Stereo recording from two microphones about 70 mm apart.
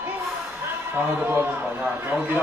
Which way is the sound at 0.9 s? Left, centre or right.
Right.